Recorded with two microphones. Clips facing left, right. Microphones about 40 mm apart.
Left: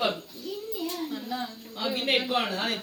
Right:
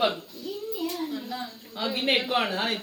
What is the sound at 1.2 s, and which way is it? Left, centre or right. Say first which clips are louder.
Speech: left 2 dB; centre.